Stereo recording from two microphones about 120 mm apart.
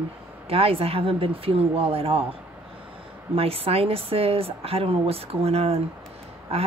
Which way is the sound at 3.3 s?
55° right (ahead or behind).